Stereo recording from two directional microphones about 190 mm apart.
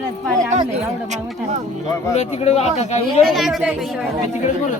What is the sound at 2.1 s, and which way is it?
Speech, 35° left (ahead or behind).